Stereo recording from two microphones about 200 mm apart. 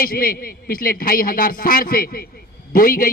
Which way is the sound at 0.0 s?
45° left (ahead or behind).